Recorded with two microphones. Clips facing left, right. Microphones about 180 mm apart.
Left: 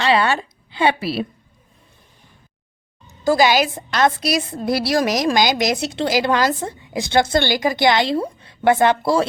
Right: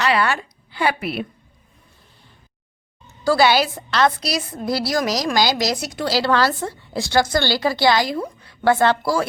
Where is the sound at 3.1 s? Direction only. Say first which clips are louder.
Left 1 dB; 15° left (ahead or behind).